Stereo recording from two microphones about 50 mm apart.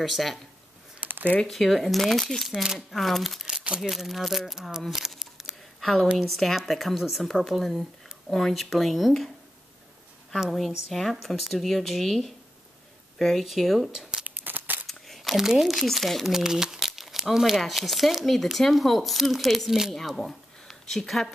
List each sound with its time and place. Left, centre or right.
0.0 s speech: centre
1.0 s a sound: right
1.5 s speech: centre
2.5 s speech: centre
3.6 s speech: centre
3.9 s speech: centre
5.2 s a sound: centre
5.8 s a sound: centre
6.1 s speech: centre
10.9 s speech: centre
14.2 s tearing: right
14.9 s speech: centre
16.3 s speech: centre